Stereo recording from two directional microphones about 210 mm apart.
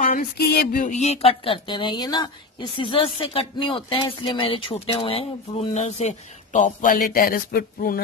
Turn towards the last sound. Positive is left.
turn(degrees=45)  # may be behind; listen again after turning